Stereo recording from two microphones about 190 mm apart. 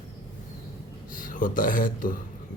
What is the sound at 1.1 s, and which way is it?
Speech, 45° left (ahead or behind).